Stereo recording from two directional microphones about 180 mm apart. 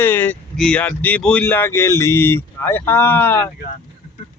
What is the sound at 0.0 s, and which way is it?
Speech, 10° left (ahead or behind).